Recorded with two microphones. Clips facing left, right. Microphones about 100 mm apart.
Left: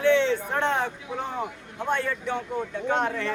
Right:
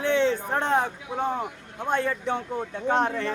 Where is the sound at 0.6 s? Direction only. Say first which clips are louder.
Right 3 dB; 40° right (ahead or behind).